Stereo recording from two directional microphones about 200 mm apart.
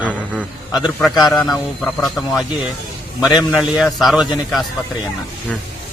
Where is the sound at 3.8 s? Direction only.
Centre (ahead or behind).